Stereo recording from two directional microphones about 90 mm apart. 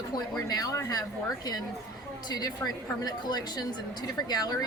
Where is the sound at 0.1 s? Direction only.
45° left (ahead or behind).